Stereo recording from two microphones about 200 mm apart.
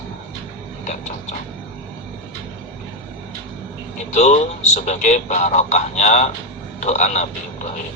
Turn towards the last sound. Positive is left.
turn(degrees=35)  # may be behind; listen again after turning